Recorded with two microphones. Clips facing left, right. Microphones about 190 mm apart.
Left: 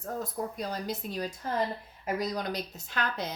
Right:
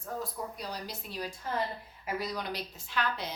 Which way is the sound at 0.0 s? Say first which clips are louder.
Left 3 dB; 45° left (ahead or behind).